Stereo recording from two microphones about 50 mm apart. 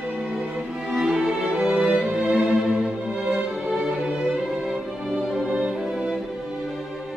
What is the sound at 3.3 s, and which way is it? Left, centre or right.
Music, centre.